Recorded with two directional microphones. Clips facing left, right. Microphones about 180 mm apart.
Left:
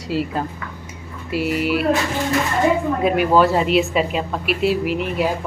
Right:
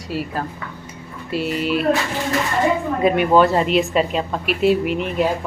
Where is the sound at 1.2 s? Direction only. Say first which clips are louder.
Left 1 dB; 10° left (ahead or behind).